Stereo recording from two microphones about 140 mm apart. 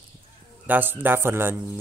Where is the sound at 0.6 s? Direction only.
15° right (ahead or behind).